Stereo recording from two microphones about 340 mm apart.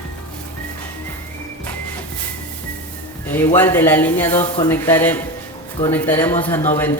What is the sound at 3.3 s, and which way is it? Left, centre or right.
A woman's voice, centre.